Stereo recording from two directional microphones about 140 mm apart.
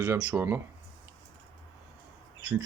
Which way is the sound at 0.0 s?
10° right (ahead or behind).